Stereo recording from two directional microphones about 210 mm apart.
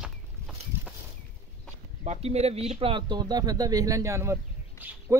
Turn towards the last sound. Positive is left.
turn(degrees=-15)  # may be behind; listen again after turning